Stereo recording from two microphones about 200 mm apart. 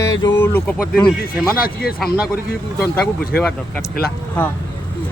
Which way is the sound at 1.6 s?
50° left (ahead or behind).